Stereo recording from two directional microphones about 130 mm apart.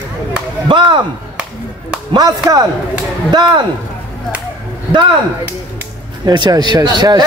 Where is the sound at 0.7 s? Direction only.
40° right (ahead or behind).